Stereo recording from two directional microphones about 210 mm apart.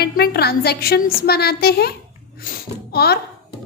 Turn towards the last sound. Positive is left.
turn(degrees=50)  # may be behind; listen again after turning